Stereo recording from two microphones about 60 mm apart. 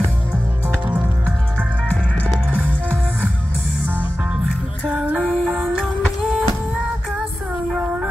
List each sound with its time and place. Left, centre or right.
5.2 s music: centre